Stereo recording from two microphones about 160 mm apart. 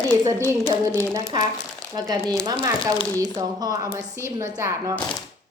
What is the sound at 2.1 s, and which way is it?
A woman's voice, 25° right (ahead or behind).